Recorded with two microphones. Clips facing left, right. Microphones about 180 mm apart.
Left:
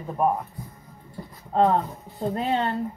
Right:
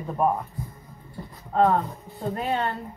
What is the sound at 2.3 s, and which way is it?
Speech, 25° left (ahead or behind).